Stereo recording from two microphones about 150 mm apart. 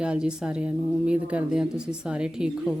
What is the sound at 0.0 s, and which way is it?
A woman's voice, 5° right (ahead or behind).